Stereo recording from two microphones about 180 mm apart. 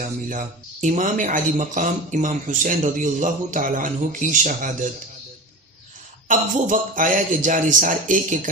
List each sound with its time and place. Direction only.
0.0 s speech: 45° right (ahead or behind)
6.2 s speech: 50° right (ahead or behind)